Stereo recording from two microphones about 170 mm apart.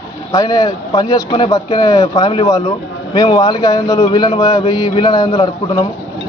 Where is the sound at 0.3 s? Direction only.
20° left (ahead or behind).